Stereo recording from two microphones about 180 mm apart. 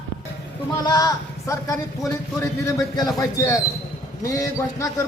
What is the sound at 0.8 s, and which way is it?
A man's voice, 20° left (ahead or behind).